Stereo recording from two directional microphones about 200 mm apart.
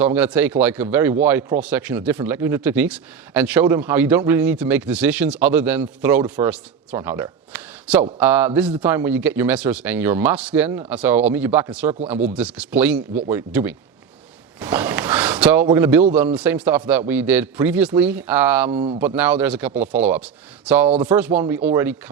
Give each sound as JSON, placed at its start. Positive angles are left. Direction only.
{"t": 0.0, "sound": "a man's voice", "side_deg": -10}
{"t": 14.6, "sound": "a sound", "side_deg": -10}
{"t": 15.6, "sound": "a man's voice", "side_deg": -10}
{"t": 18.7, "sound": "speech", "side_deg": -30}
{"t": 18.9, "sound": "a man's voice", "side_deg": -10}